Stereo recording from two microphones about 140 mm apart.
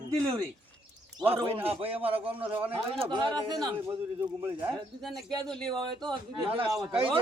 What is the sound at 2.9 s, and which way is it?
A man's voice, 40° right (ahead or behind).